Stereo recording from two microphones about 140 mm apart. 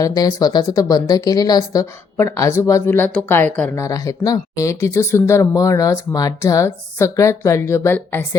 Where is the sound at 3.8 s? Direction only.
25° left (ahead or behind).